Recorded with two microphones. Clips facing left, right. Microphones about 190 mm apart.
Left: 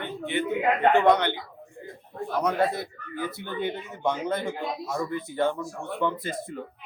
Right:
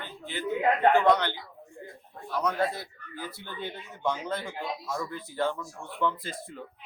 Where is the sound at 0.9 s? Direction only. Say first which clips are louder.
Left 2 dB; 20° left (ahead or behind).